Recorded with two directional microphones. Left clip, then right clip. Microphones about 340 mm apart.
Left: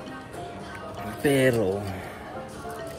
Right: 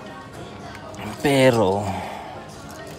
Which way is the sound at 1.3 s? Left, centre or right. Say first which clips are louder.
Right 7 dB; right.